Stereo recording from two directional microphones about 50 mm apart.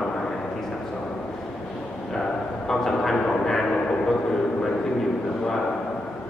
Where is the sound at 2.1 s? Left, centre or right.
Centre.